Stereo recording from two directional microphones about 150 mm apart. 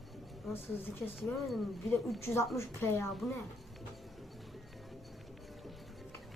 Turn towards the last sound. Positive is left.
turn(degrees=0)  # may be behind; listen again after turning